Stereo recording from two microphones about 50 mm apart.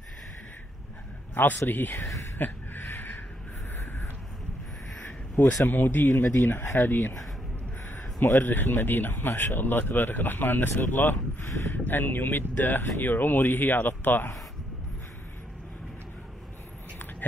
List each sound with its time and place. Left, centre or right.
1.3 s a man's voice: left
2.3 s a sound: left
5.4 s speech: left
8.2 s speech: left
17.2 s speech: left